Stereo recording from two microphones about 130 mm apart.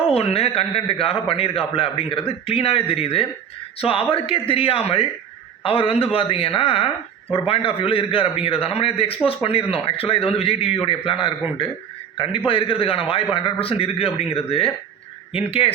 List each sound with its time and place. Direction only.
0.0 s a man's voice: 50° left (ahead or behind)